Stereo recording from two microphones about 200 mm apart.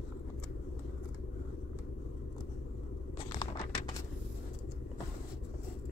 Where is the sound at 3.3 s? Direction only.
20° left (ahead or behind).